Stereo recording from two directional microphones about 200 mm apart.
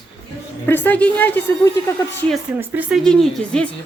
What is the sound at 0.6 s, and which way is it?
A man's voice, 10° left (ahead or behind).